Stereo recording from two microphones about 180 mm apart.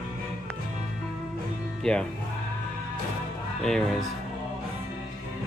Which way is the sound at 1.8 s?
5° left (ahead or behind).